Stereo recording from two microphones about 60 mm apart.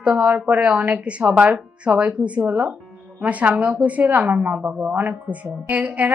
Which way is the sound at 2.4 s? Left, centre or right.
Right.